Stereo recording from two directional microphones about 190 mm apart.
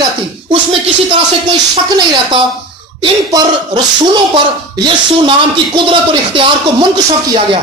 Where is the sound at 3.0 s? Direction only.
25° right (ahead or behind).